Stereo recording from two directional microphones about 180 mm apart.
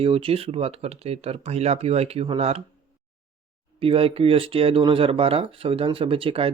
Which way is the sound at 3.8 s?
30° right (ahead or behind).